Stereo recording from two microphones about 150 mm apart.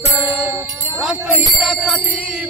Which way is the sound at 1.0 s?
5° right (ahead or behind).